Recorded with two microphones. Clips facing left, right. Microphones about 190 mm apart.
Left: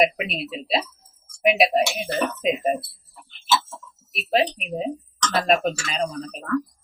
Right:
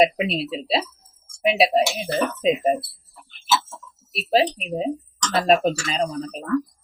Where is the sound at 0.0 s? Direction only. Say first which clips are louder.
Right 3 dB; 30° right (ahead or behind).